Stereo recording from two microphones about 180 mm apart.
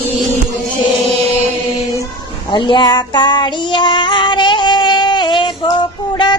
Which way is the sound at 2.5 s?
25° left (ahead or behind).